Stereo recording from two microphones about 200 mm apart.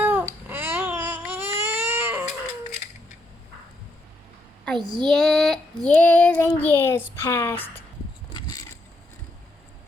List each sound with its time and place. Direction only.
0.0 s baby cry: 10° right (ahead or behind)
4.6 s child singing: 5° left (ahead or behind)
8.3 s vehicle: 20° left (ahead or behind)